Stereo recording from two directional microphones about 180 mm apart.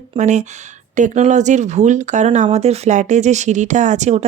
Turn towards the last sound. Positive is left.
turn(degrees=-40)  # may be behind; listen again after turning